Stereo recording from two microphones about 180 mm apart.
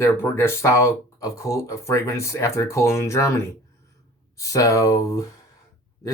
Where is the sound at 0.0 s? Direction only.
15° left (ahead or behind).